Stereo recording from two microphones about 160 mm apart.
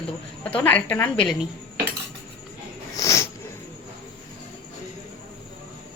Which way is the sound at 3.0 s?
20° left (ahead or behind).